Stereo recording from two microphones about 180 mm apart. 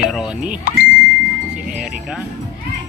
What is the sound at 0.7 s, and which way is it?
Speech, 55° left (ahead or behind).